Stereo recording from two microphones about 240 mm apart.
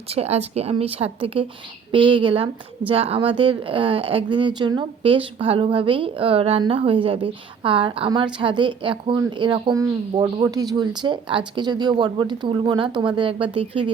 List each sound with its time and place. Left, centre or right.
0.1 s speech: right